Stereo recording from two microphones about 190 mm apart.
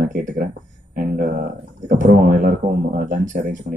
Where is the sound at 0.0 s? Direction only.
45° right (ahead or behind).